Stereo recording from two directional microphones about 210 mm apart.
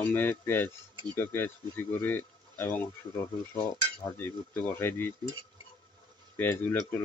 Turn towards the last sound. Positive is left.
turn(degrees=10)  # may be behind; listen again after turning